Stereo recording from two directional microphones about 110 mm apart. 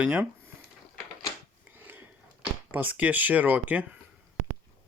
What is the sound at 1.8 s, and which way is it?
Sniff, 15° right (ahead or behind).